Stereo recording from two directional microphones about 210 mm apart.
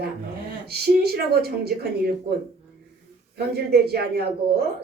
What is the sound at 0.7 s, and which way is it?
Speech, 50° right (ahead or behind).